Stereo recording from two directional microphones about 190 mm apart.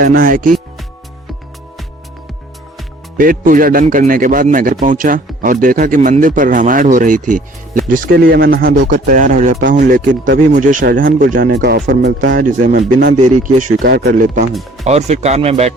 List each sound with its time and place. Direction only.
0.0 s a man's voice: 50° right (ahead or behind)
3.2 s a man's voice: 45° right (ahead or behind)
14.5 s speech: centre (ahead or behind)
14.8 s speech: 35° right (ahead or behind)